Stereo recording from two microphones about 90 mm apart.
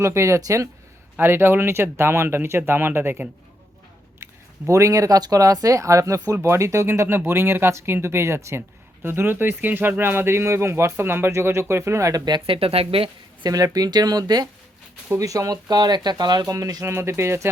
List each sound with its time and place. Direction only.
0.0 s speech: 30° right (ahead or behind)
12.5 s speech: 90° right
13.4 s speech: 45° right (ahead or behind)
15.7 s speech: 50° right (ahead or behind)
16.9 s speech: 30° right (ahead or behind)